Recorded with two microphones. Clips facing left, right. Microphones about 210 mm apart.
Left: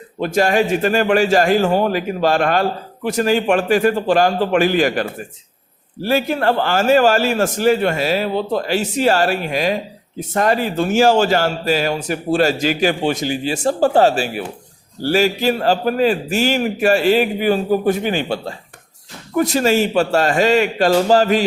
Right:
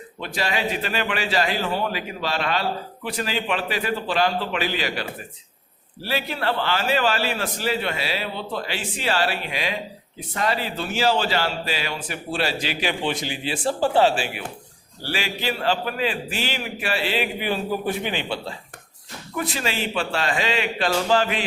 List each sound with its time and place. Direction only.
0.2 s a man's voice: 45° left (ahead or behind)